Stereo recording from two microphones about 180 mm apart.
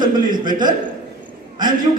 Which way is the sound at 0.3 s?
50° right (ahead or behind).